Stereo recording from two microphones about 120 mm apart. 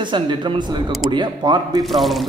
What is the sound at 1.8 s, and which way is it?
Speech, centre (ahead or behind).